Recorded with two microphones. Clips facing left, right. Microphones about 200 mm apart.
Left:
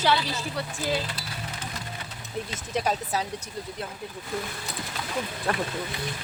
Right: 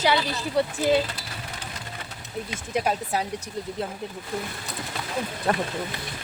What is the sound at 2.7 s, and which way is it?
Speech, 10° right (ahead or behind).